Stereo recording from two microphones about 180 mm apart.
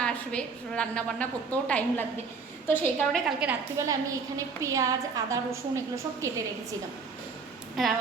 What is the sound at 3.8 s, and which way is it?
A woman's voice, 15° right (ahead or behind).